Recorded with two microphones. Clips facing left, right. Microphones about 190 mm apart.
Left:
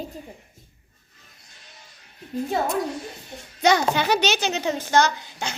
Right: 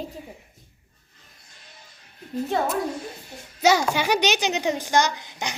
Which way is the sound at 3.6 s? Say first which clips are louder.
Even; 5° right (ahead or behind).